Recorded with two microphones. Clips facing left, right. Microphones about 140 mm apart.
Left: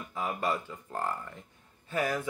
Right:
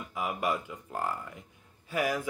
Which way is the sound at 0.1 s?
15° right (ahead or behind).